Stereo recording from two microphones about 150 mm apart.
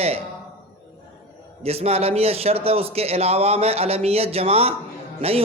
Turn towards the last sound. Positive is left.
turn(degrees=-40)  # may be behind; listen again after turning